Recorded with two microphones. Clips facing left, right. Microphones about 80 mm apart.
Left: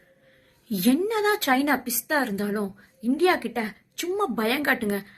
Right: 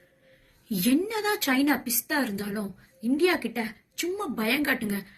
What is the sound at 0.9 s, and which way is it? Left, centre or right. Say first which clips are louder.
A woman's voice: left 3 dB; left.